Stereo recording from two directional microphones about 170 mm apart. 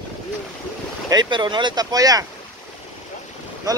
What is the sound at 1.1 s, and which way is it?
Speech, 25° right (ahead or behind).